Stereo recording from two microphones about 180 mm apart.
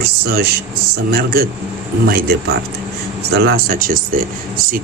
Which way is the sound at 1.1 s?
55° right (ahead or behind).